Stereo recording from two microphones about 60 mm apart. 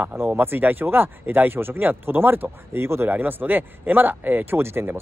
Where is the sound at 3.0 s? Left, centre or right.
Right.